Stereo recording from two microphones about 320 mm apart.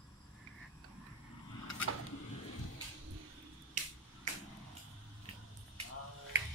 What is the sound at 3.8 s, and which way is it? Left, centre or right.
Finger snapping, right.